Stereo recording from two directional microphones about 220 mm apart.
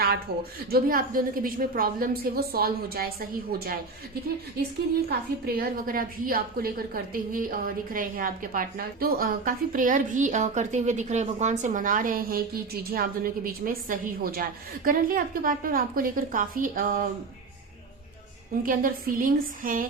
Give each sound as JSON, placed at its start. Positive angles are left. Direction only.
{"t": 0.7, "sound": "a woman's voice", "side_deg": -40}
{"t": 5.0, "sound": "a woman's voice", "side_deg": -45}
{"t": 18.6, "sound": "a woman's voice", "side_deg": -40}